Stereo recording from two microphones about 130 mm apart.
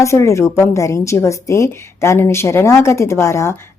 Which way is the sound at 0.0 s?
20° left (ahead or behind).